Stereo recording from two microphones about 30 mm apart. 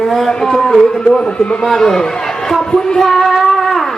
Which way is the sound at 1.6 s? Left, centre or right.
Centre.